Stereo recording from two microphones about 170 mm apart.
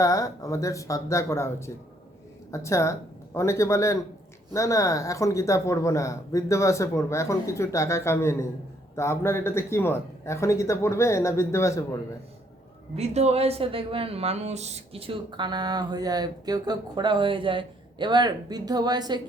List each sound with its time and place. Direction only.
0.0 s speech: 20° left (ahead or behind)
13.0 s a woman's voice: 40° right (ahead or behind); by 19.2 s 25° right (ahead or behind)